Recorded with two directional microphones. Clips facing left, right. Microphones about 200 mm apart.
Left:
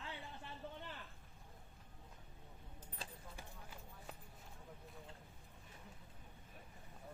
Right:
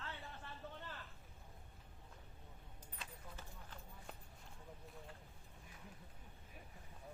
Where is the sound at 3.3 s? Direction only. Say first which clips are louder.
Left 1 dB; 10° left (ahead or behind).